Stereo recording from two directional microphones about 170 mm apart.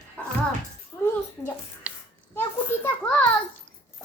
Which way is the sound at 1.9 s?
10° right (ahead or behind).